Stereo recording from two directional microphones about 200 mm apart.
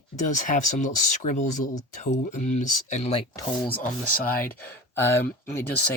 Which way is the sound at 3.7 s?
45° left (ahead or behind).